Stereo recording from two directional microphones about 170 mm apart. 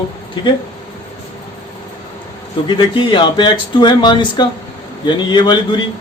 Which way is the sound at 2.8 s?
30° left (ahead or behind).